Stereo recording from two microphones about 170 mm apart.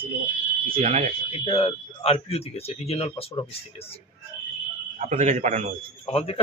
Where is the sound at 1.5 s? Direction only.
35° left (ahead or behind).